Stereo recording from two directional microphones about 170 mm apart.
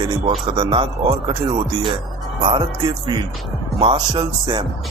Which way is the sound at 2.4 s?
30° right (ahead or behind).